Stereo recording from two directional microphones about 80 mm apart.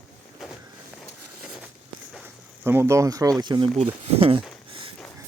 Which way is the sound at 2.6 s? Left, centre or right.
Right.